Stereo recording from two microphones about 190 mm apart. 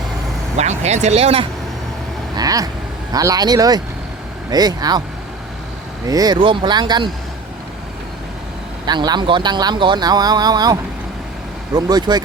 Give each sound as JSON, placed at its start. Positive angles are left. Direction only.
{"t": 0.5, "sound": "speech", "side_deg": -35}
{"t": 2.3, "sound": "speech", "side_deg": -20}
{"t": 6.1, "sound": "speech", "side_deg": -20}
{"t": 8.9, "sound": "speech", "side_deg": -25}